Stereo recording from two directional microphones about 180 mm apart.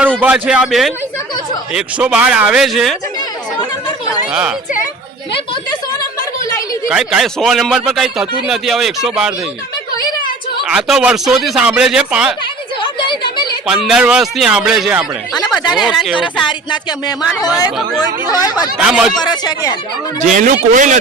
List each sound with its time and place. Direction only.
0.2 s a man's voice: 10° right (ahead or behind)
4.3 s speech: 5° right (ahead or behind)
6.8 s a man's voice: 5° right (ahead or behind)
10.7 s a man's voice: 5° right (ahead or behind)
12.8 s a sound: 25° left (ahead or behind)
13.7 s a man's voice: 5° right (ahead or behind)
16.5 s speech: 25° left (ahead or behind)
18.8 s a man's voice: 5° right (ahead or behind)
19.2 s speech: 25° left (ahead or behind)
20.3 s speech: 45° right (ahead or behind)